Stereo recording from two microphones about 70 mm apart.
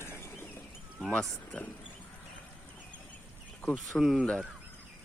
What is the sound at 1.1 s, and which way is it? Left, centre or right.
Speech, centre.